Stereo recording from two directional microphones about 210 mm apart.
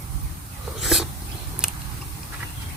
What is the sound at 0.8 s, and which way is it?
Dog, centre (ahead or behind).